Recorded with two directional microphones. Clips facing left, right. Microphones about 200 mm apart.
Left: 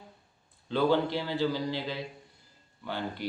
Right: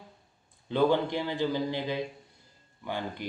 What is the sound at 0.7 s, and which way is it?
Speech, 15° right (ahead or behind).